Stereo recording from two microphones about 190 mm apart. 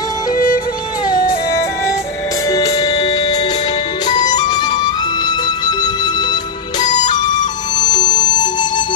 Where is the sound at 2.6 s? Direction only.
35° left (ahead or behind).